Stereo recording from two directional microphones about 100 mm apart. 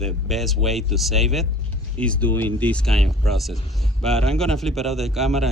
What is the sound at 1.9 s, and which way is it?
Speech, 10° left (ahead or behind).